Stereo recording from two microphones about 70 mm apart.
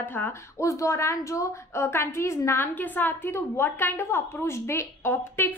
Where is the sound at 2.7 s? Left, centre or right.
Left.